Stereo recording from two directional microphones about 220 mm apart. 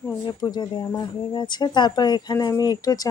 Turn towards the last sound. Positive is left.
turn(degrees=15)  # may be behind; listen again after turning